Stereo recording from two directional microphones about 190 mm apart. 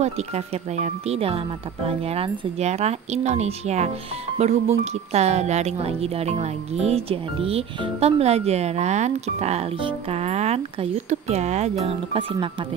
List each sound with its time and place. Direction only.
0.0 s speech: 35° right (ahead or behind)